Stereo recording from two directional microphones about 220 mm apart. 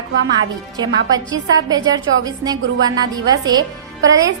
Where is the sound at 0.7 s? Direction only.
15° right (ahead or behind).